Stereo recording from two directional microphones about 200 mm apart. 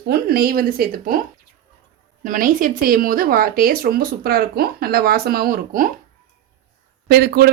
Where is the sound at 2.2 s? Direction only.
40° right (ahead or behind).